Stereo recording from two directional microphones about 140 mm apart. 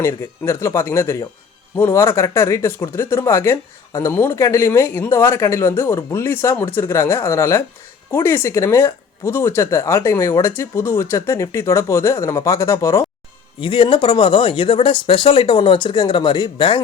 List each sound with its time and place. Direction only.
0.0 s speech: 20° left (ahead or behind)
13.6 s speech: 35° left (ahead or behind)